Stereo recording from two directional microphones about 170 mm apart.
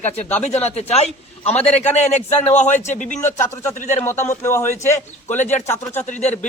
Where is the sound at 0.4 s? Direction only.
40° left (ahead or behind).